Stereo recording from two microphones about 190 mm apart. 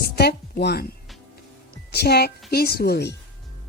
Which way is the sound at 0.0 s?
55° left (ahead or behind).